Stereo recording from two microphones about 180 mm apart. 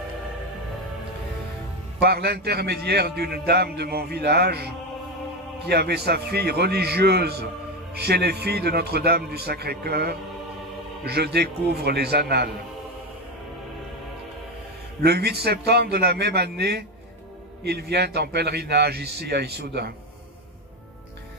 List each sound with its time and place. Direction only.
2.0 s a man's voice: 65° right (ahead or behind)
5.7 s a man's voice: 65° right (ahead or behind)
15.0 s a man's voice: 60° right (ahead or behind)